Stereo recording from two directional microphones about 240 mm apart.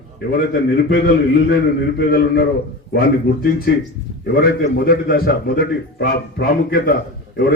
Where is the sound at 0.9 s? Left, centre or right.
Left.